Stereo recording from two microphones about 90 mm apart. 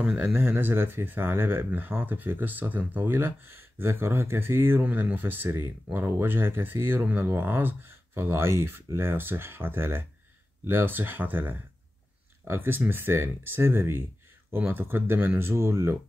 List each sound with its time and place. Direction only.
0.0 s speech: 15° right (ahead or behind); by 16.0 s 30° right (ahead or behind)